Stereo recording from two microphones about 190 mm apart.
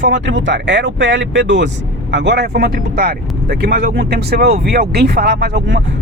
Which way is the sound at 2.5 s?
50° right (ahead or behind).